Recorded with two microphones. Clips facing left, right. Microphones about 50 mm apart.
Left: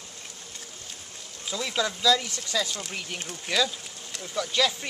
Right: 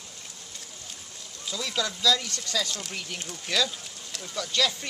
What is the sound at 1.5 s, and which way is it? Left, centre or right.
Speech, left.